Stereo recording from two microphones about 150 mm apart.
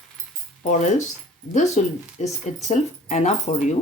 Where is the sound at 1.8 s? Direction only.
50° left (ahead or behind).